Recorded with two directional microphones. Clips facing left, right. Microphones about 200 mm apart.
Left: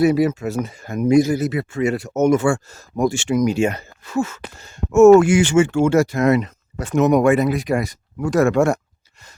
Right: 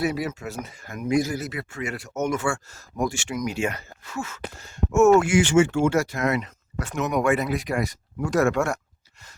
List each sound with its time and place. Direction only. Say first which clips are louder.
0.0 s speech: left 10 dB; 25° left (ahead or behind)